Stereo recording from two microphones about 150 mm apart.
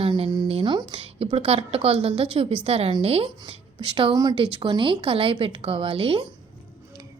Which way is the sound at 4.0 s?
30° right (ahead or behind).